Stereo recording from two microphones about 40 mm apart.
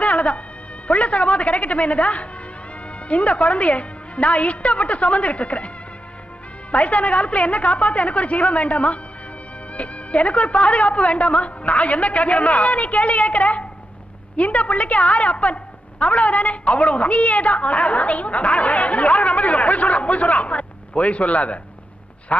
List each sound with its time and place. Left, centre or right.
0.0 s music: left
0.9 s a woman's voice: left